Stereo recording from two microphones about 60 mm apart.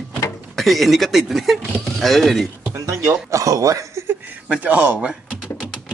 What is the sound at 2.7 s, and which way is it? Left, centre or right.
Speech, right.